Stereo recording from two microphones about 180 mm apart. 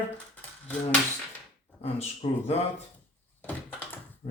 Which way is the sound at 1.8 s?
35° left (ahead or behind).